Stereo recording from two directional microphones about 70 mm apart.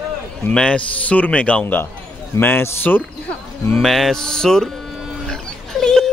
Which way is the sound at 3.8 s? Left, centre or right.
Centre.